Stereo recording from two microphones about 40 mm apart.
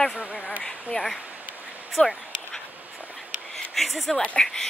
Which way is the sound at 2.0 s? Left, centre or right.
Left.